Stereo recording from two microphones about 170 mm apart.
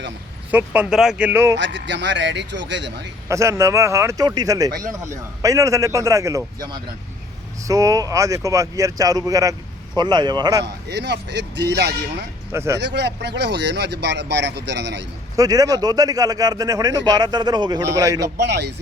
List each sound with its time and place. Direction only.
0.5 s speech: 10° right (ahead or behind)
1.5 s speech: 90° right
3.2 s speech: 20° right (ahead or behind)
10.6 s speech: 90° right
12.5 s speech: 15° right (ahead or behind)
12.8 s speech: 85° right
15.4 s speech: 20° right (ahead or behind)
18.4 s speech: 85° right